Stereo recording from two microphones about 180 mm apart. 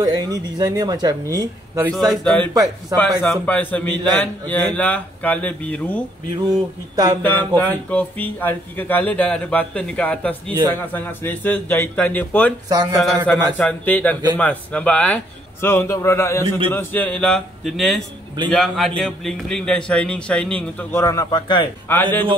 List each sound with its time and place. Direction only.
0.0 s speech: 20° right (ahead or behind)
1.9 s a man's voice: 5° left (ahead or behind)
7.2 s speech: 10° left (ahead or behind)
12.6 s speech: 20° right (ahead or behind)
13.0 s a man's voice: centre (ahead or behind)
21.0 s a man's voice: 20° left (ahead or behind)
21.8 s speech: 10° left (ahead or behind)